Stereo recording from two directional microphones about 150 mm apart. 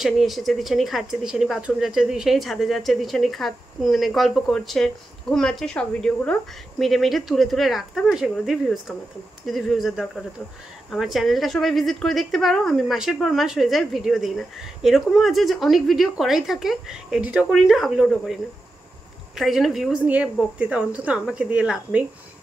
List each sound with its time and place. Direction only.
0.0 s a woman's voice: centre (ahead or behind)